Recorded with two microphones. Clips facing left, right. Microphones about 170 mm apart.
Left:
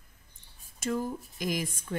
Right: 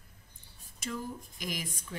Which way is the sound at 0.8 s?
45° left (ahead or behind).